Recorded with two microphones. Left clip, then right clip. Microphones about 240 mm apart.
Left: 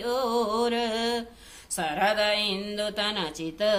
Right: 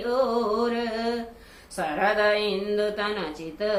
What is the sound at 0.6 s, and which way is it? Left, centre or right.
Mantra, left.